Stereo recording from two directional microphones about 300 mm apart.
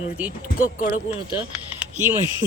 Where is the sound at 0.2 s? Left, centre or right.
Centre.